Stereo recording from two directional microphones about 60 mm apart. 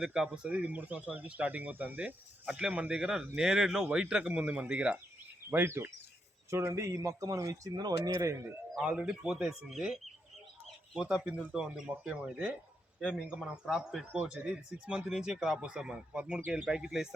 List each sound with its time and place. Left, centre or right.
0.0 s speech: centre
0.3 s speech: right
5.5 s speech: right
6.8 s speech: right
8.8 s speech: centre
9.4 s speech: centre
11.0 s speech: centre